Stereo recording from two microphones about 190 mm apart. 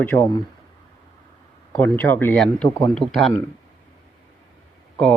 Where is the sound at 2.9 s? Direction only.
Centre (ahead or behind).